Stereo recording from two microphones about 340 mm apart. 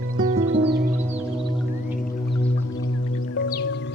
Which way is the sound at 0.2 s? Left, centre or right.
Right.